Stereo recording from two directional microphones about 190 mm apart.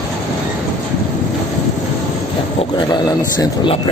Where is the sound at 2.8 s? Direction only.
25° left (ahead or behind).